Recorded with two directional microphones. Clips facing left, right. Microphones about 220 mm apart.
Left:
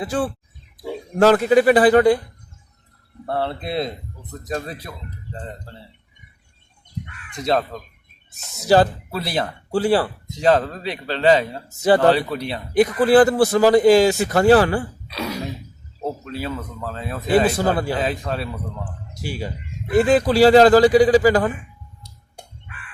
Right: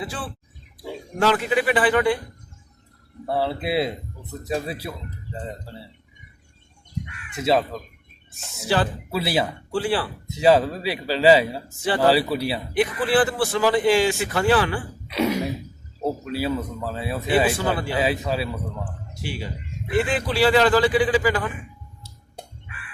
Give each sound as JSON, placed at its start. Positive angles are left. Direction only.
{"t": 0.0, "sound": "speech", "side_deg": 45}
{"t": 3.2, "sound": "speech", "side_deg": -5}
{"t": 7.3, "sound": "speech", "side_deg": -5}
{"t": 8.6, "sound": "speech", "side_deg": 40}
{"t": 9.1, "sound": "speech", "side_deg": -5}
{"t": 9.7, "sound": "speech", "side_deg": 40}
{"t": 10.2, "sound": "speech", "side_deg": -5}
{"t": 12.7, "sound": "speech", "side_deg": 40}
{"t": 15.0, "sound": "throat clearing", "side_deg": -20}
{"t": 16.2, "sound": "speech", "side_deg": -10}
{"t": 17.2, "sound": "speech", "side_deg": 40}
{"t": 18.0, "sound": "speech", "side_deg": -5}
{"t": 19.1, "sound": "speech", "side_deg": 40}